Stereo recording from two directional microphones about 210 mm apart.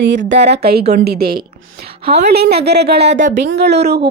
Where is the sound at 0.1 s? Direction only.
55° right (ahead or behind).